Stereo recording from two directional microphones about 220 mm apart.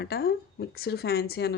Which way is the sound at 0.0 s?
45° left (ahead or behind).